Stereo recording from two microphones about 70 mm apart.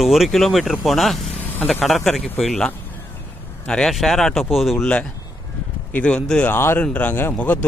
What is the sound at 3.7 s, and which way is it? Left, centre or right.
Speech, centre.